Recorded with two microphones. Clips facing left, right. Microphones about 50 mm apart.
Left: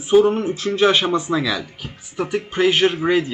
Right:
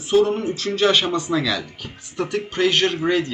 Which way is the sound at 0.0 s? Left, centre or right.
Centre.